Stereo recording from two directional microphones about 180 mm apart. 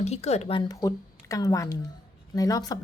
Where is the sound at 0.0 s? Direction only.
35° left (ahead or behind).